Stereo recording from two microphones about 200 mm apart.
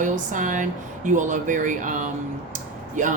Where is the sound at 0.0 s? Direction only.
40° right (ahead or behind).